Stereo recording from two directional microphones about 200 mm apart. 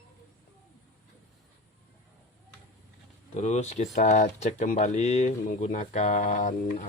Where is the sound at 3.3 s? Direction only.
35° left (ahead or behind).